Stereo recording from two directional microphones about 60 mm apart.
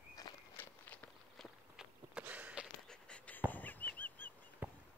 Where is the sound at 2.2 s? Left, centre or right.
Right.